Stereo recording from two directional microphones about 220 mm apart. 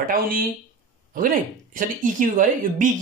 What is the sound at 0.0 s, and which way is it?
Speech, 40° right (ahead or behind).